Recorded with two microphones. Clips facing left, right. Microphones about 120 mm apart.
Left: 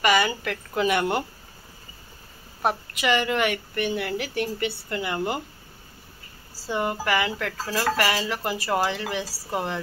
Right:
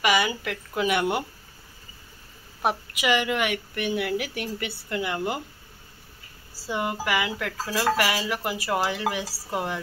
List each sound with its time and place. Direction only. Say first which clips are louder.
0.0 s a woman's voice: left 2 dB; 5° right (ahead or behind)
2.6 s a woman's voice: left 1 dB; 10° right (ahead or behind)
6.7 s speech: left 2 dB; 5° right (ahead or behind)